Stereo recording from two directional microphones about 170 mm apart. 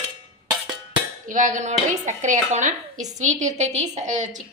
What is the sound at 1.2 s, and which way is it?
Speech, 50° right (ahead or behind).